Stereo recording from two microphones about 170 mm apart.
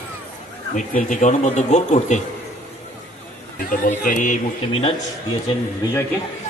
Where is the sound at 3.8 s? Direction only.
55° left (ahead or behind).